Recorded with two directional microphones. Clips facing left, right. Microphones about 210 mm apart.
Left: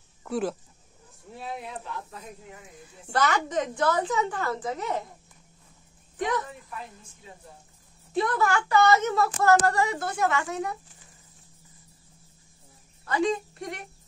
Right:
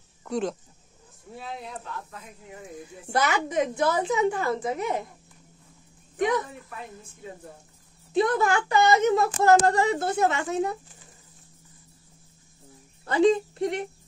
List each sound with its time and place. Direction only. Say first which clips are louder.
0.2 s speech: even; 5° left (ahead or behind)
3.1 s a woman's voice: even; 10° right (ahead or behind)
8.1 s speech: right 3 dB; 20° right (ahead or behind)
13.0 s a woman's voice: right 6 dB; 30° right (ahead or behind)